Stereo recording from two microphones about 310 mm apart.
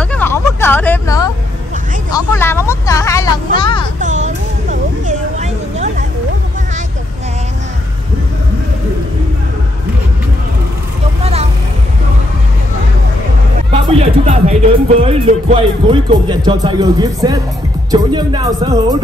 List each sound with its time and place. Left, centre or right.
0.0 s a sound: centre
4.0 s music: right
13.7 s music: centre
17.9 s speech: centre